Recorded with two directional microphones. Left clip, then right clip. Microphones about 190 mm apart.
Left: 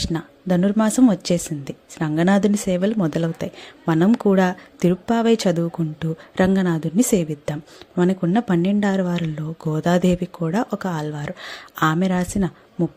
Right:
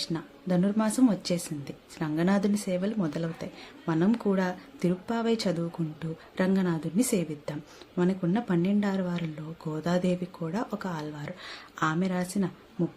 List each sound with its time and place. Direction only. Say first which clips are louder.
0.0 s speech: left 7 dB; 40° left (ahead or behind)